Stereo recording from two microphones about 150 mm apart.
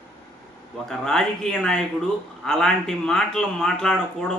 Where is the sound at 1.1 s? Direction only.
5° left (ahead or behind).